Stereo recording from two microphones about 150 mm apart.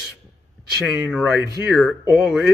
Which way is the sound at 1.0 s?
5° left (ahead or behind).